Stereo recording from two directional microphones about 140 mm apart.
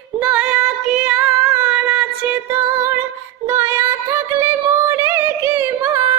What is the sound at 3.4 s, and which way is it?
Music, 20° right (ahead or behind).